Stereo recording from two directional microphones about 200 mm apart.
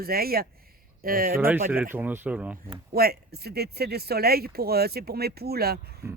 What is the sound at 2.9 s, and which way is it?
Speech, 50° right (ahead or behind).